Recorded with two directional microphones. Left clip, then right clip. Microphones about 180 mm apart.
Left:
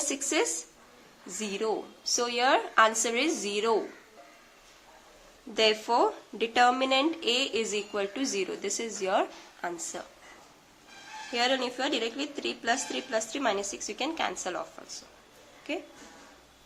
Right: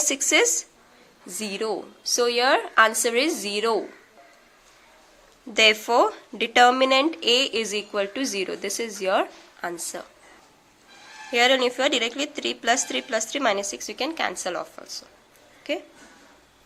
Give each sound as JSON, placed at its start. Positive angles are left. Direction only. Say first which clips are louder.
{"t": 0.1, "sound": "speech", "louder": "right 9 dB", "side_deg": -30}
{"t": 5.5, "sound": "speech", "louder": "right 7 dB", "side_deg": -30}
{"t": 11.3, "sound": "a woman's voice", "louder": "right 9 dB", "side_deg": -30}